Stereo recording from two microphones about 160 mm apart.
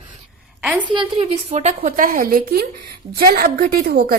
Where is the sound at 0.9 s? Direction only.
30° right (ahead or behind).